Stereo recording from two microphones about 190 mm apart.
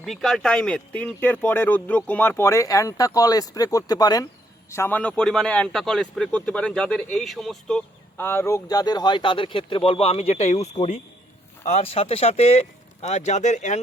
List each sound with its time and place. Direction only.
0.0 s a man's voice: centre (ahead or behind)
8.2 s speech: 10° left (ahead or behind); by 13.8 s 40° left (ahead or behind)